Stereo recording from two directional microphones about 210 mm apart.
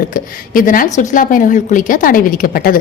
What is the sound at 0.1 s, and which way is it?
Speech, 40° left (ahead or behind).